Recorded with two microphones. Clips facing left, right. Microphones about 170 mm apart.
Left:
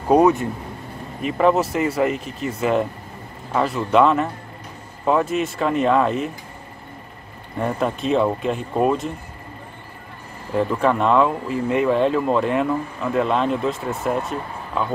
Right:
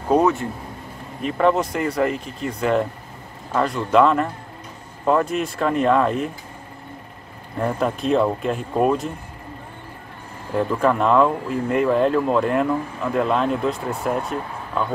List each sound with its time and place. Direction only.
0.1 s speech: 15° left (ahead or behind)
1.2 s speech: 5° left (ahead or behind)
7.5 s speech: centre (ahead or behind)
10.5 s speech: centre (ahead or behind)